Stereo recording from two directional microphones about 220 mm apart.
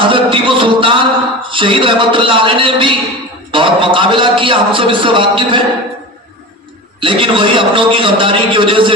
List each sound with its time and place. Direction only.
0.0 s a sound: 25° right (ahead or behind)
1.5 s a man's voice: 25° right (ahead or behind)
7.0 s a man's voice: 25° right (ahead or behind)